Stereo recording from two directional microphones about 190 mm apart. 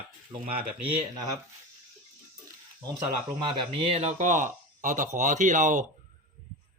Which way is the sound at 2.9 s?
20° right (ahead or behind).